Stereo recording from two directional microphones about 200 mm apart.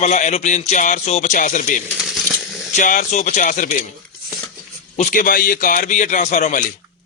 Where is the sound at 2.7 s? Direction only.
40° left (ahead or behind).